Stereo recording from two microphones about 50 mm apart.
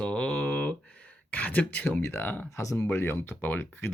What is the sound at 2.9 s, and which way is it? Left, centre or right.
Speech, left.